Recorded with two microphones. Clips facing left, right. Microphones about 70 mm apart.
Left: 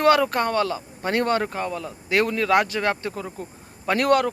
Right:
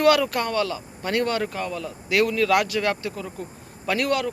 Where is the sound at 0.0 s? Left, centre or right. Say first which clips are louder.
Left 1 dB; left.